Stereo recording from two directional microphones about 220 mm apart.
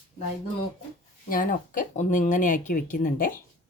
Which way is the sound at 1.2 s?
40° left (ahead or behind).